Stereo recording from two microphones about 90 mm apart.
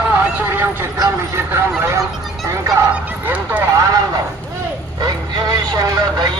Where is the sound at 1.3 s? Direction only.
25° right (ahead or behind).